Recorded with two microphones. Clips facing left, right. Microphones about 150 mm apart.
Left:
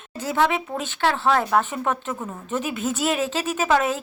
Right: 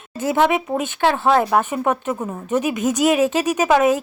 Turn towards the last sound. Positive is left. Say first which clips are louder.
# right 5 dB
turn(degrees=-15)  # may be behind; listen again after turning